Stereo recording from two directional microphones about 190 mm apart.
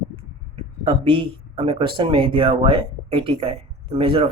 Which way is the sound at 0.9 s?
30° right (ahead or behind).